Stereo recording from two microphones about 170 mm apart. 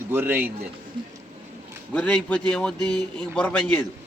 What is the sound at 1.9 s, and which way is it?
A man's voice, 10° left (ahead or behind).